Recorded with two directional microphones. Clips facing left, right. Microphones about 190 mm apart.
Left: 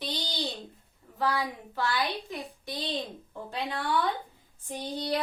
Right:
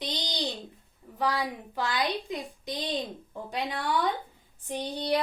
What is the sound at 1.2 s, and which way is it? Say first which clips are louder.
Speech: even; 15° right (ahead or behind).